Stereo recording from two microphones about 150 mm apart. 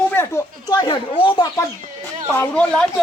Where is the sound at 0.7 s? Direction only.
30° left (ahead or behind).